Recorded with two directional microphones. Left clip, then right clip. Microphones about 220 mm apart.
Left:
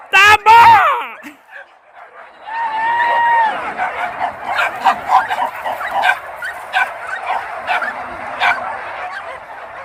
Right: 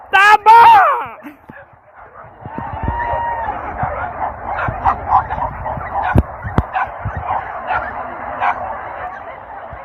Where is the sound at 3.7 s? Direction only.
85° left.